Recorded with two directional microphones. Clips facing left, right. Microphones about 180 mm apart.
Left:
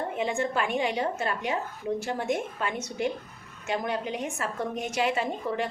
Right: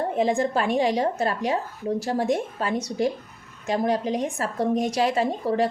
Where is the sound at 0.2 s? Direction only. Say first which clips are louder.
Right 6 dB; 35° right (ahead or behind).